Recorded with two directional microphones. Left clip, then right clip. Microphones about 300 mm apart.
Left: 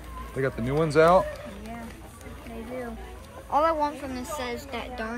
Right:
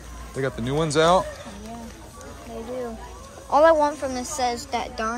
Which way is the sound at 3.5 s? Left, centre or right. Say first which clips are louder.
Right 7 dB; right.